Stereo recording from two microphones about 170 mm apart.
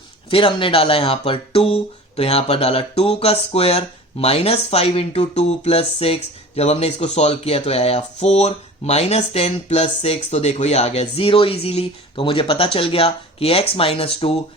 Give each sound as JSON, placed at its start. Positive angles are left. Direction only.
{"t": 0.3, "sound": "speech", "side_deg": 30}